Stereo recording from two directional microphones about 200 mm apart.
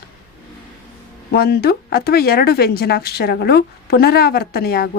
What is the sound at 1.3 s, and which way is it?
Speech, 50° left (ahead or behind).